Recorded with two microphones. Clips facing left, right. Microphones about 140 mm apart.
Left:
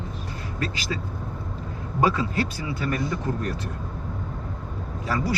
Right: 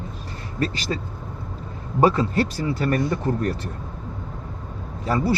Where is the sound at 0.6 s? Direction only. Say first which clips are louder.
Right 5 dB; 35° right (ahead or behind).